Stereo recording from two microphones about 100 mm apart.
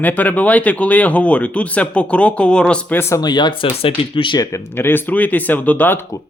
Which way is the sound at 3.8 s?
60° left (ahead or behind).